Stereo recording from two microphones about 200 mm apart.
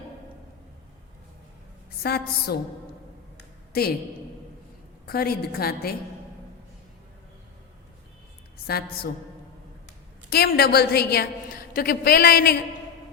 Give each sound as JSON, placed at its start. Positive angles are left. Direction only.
{"t": 2.0, "sound": "a woman's voice", "side_deg": 50}
{"t": 3.7, "sound": "a woman's voice", "side_deg": 50}
{"t": 5.0, "sound": "a woman's voice", "side_deg": 50}
{"t": 8.6, "sound": "a woman's voice", "side_deg": 50}
{"t": 10.2, "sound": "a woman's voice", "side_deg": 50}